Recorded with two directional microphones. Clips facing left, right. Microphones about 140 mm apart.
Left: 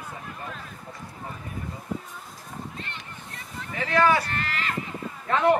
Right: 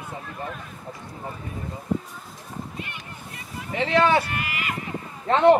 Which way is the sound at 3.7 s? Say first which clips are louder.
Right 2 dB; 25° right (ahead or behind).